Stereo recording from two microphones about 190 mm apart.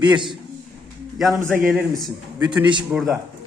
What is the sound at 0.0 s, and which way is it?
Speech, 25° right (ahead or behind).